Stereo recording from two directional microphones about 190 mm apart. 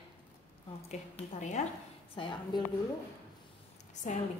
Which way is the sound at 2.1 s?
25° left (ahead or behind).